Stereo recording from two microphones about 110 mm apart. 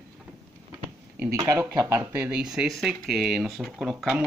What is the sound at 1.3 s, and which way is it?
Speech, 25° right (ahead or behind).